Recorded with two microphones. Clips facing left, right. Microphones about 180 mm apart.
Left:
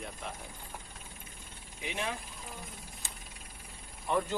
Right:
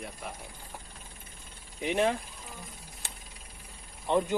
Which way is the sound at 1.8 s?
50° right (ahead or behind).